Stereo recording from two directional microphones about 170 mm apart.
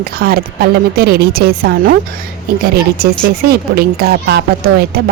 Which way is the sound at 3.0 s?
65° right (ahead or behind).